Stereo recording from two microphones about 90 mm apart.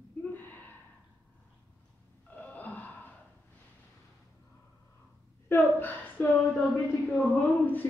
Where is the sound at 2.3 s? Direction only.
15° left (ahead or behind).